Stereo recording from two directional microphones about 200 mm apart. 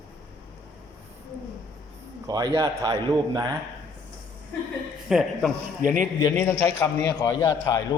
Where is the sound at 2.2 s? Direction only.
20° right (ahead or behind).